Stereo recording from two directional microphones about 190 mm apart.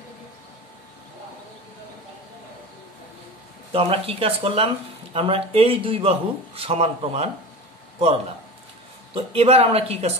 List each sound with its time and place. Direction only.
3.7 s speech: 30° right (ahead or behind)
9.1 s speech: 30° right (ahead or behind)